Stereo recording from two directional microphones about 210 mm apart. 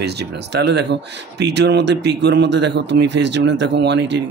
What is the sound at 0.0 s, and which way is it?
A man's voice, 50° right (ahead or behind).